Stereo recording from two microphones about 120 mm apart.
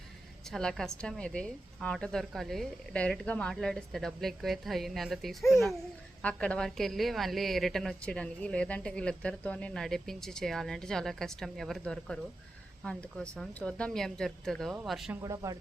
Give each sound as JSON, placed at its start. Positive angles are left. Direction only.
{"t": 0.4, "sound": "a woman's voice", "side_deg": 5}
{"t": 15.2, "sound": "speech", "side_deg": -30}